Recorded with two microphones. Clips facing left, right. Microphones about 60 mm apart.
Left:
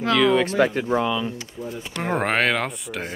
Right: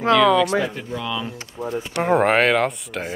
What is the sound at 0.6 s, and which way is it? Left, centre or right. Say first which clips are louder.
Speech: left 4 dB; left.